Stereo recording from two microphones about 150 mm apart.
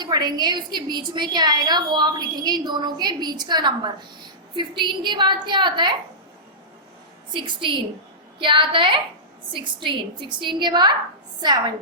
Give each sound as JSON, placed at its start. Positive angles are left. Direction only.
{"t": 0.0, "sound": "a woman's voice", "side_deg": -30}
{"t": 7.3, "sound": "a woman's voice", "side_deg": -30}